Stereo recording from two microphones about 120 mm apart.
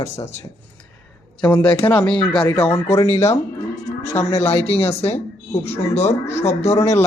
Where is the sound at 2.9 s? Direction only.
25° left (ahead or behind).